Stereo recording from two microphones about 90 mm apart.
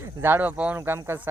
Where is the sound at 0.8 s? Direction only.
25° right (ahead or behind).